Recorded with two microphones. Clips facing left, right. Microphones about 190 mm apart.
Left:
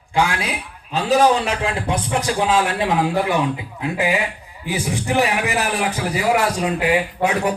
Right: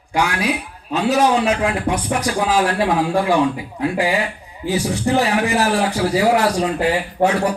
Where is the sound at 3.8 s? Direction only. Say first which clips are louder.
Right 2 dB; 20° left (ahead or behind).